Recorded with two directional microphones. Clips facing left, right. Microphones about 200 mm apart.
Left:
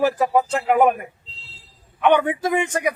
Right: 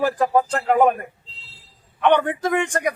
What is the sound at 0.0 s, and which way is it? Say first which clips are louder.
A man's voice: left 1 dB; 10° left (ahead or behind).